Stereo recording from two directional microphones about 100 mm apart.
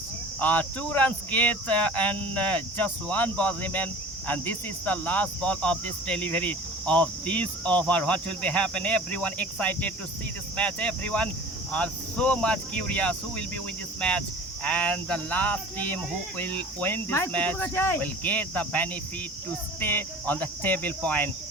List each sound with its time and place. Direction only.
0.3 s speech: 15° left (ahead or behind)